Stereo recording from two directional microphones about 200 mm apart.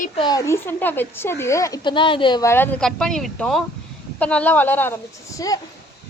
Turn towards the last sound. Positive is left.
turn(degrees=15)  # may be behind; listen again after turning